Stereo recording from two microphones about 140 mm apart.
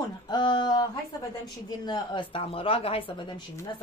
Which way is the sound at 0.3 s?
35° left (ahead or behind).